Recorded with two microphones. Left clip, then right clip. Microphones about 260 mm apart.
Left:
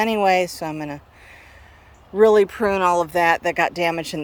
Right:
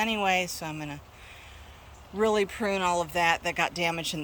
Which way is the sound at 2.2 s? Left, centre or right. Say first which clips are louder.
Left 11 dB; centre.